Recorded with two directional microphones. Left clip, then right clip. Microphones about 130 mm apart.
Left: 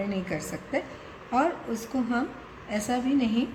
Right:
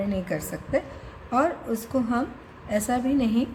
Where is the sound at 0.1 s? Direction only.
55° right (ahead or behind).